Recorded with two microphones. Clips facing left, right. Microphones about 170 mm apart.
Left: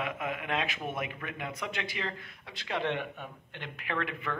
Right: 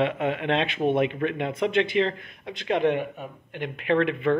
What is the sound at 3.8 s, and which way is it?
Speech, 25° right (ahead or behind).